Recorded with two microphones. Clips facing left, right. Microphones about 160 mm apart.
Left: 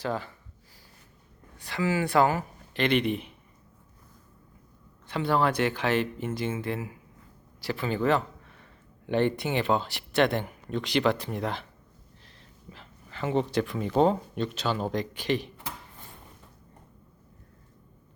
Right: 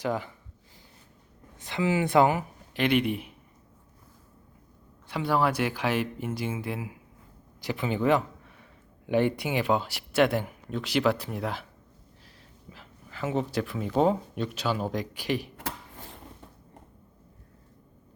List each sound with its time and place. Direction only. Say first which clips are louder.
0.0 s speech: right 2 dB; 15° right (ahead or behind)
1.5 s speech: right 1 dB; 20° right (ahead or behind)
5.0 s speech: even; 10° right (ahead or behind)
12.7 s speech: left 1 dB; 5° right (ahead or behind)